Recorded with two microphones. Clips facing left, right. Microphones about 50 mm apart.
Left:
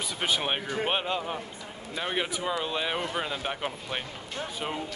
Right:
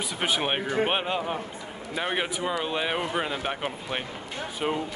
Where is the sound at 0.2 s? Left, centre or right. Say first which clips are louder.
Right 2 dB; centre.